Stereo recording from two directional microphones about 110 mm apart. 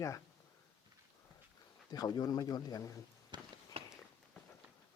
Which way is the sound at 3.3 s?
45° right (ahead or behind).